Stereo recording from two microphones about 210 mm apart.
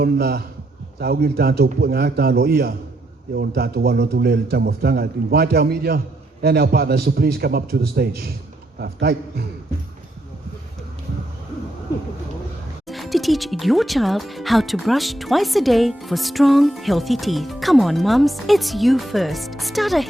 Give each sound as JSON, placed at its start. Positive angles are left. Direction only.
{"t": 0.0, "sound": "a man's voice", "side_deg": -50}
{"t": 12.9, "sound": "speech", "side_deg": 0}